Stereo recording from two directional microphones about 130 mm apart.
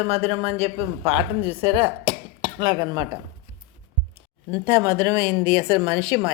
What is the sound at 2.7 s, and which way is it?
Speech, 35° right (ahead or behind).